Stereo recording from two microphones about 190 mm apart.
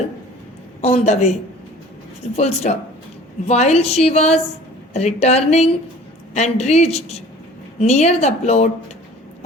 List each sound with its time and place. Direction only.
0.8 s a woman's voice: 35° left (ahead or behind)